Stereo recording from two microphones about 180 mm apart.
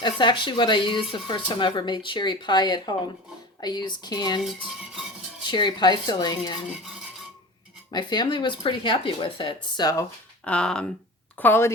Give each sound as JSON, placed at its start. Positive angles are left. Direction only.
{"t": 0.0, "sound": "speech", "side_deg": 25}
{"t": 5.5, "sound": "speech", "side_deg": 25}
{"t": 7.9, "sound": "speech", "side_deg": 25}